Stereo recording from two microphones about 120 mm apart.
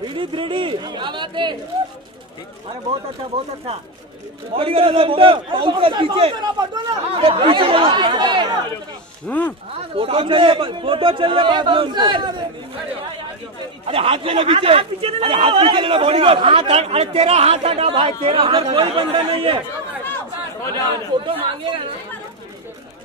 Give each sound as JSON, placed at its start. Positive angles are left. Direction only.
{"t": 0.1, "sound": "speech", "side_deg": -45}
{"t": 4.6, "sound": "speech", "side_deg": -50}
{"t": 9.3, "sound": "speech", "side_deg": 15}
{"t": 9.8, "sound": "speech", "side_deg": -50}
{"t": 13.8, "sound": "speech", "side_deg": -50}
{"t": 21.3, "sound": "speech", "side_deg": -45}